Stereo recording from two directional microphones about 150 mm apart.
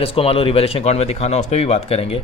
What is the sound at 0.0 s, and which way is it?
Speech, 40° left (ahead or behind).